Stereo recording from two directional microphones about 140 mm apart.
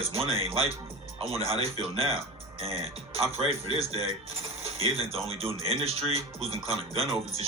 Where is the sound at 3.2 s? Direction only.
45° right (ahead or behind).